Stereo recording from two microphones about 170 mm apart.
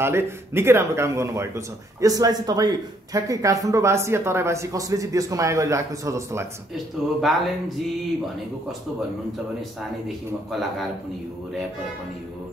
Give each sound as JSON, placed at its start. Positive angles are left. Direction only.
{"t": 0.0, "sound": "speech", "side_deg": -15}
{"t": 7.2, "sound": "a man's voice", "side_deg": 0}
{"t": 10.0, "sound": "a man's voice", "side_deg": 0}